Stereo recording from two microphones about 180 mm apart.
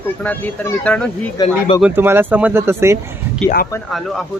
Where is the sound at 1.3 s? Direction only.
25° left (ahead or behind).